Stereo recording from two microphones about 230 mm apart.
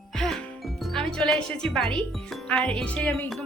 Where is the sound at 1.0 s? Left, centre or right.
Centre.